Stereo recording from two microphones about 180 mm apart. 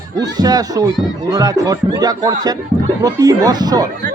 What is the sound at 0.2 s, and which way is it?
Speech, 20° right (ahead or behind).